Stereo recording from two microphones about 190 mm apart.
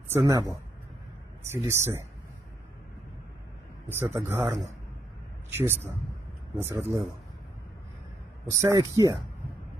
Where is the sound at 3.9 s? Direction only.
10° right (ahead or behind).